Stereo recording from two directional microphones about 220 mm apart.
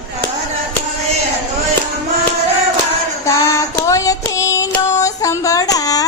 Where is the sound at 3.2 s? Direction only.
15° left (ahead or behind).